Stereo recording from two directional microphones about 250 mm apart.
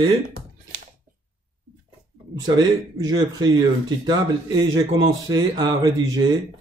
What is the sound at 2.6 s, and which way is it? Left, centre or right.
A man's voice, centre.